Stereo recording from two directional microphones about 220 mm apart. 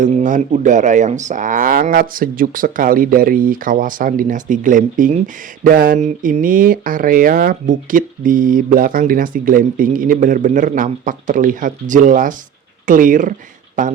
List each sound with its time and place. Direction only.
0.0 s speech: 35° right (ahead or behind)